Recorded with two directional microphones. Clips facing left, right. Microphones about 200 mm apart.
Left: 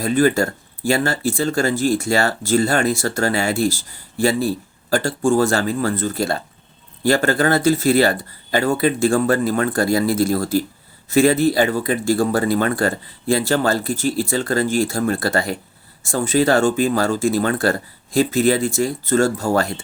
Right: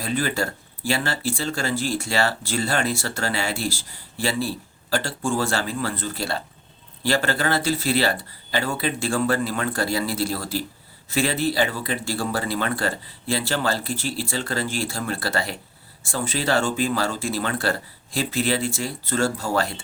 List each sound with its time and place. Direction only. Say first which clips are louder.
0.0 s speech: left 8 dB; 45° left (ahead or behind)